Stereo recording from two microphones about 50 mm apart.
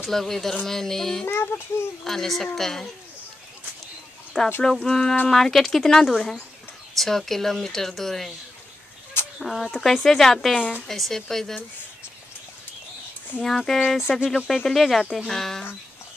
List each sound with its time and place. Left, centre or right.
0.1 s speech: centre
1.2 s a child's voice: left
2.0 s speech: centre
4.6 s speech: centre
9.4 s speech: centre
13.5 s speech: centre